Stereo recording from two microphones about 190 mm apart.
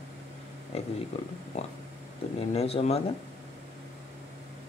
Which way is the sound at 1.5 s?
35° left (ahead or behind).